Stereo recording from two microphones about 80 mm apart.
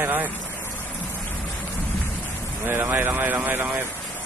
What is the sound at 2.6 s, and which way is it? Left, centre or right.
A man's voice, right.